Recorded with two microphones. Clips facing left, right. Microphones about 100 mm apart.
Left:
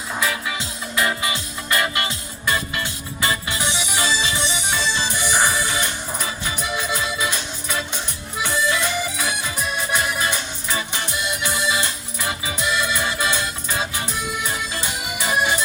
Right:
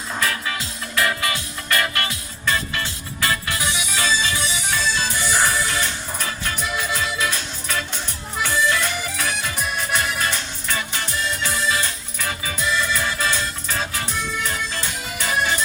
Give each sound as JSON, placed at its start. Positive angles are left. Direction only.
{"t": 0.2, "sound": "music", "side_deg": 10}
{"t": 0.9, "sound": "music", "side_deg": 20}